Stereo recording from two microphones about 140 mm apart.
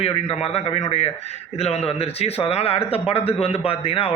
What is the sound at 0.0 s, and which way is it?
A man's voice, 45° left (ahead or behind).